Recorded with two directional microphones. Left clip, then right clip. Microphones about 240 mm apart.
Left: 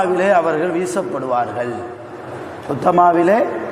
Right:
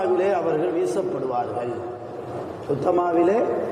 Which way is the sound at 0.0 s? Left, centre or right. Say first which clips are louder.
Left 7 dB; left.